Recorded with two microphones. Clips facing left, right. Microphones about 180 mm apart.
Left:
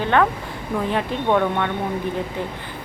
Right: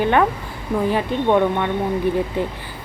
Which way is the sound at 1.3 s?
15° right (ahead or behind).